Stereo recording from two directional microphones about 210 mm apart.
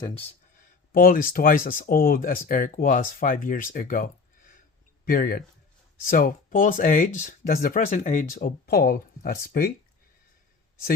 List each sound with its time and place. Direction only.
0.9 s speech: 45° left (ahead or behind)